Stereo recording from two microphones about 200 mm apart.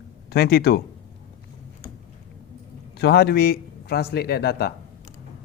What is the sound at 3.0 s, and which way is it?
Speech, 55° left (ahead or behind).